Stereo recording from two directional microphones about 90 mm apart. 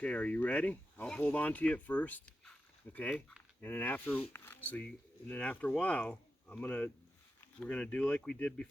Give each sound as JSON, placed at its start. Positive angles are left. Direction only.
{"t": 0.0, "sound": "speech", "side_deg": 15}